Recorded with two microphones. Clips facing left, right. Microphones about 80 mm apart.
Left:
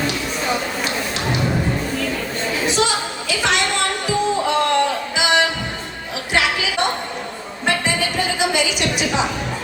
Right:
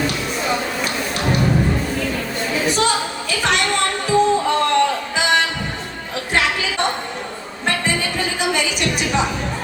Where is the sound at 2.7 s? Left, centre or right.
Centre.